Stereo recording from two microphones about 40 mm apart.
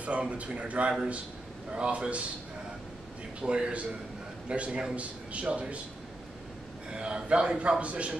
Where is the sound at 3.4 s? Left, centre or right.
Right.